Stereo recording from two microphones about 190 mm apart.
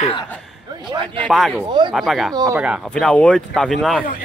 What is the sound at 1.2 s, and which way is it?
Speech, centre (ahead or behind).